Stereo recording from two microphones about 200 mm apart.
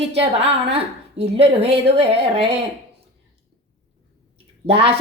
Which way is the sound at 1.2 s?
30° right (ahead or behind).